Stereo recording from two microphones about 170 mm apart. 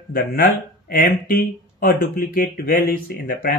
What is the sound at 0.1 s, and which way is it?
Speech, 55° left (ahead or behind).